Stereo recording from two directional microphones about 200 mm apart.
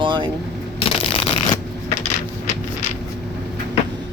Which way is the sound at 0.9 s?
25° left (ahead or behind).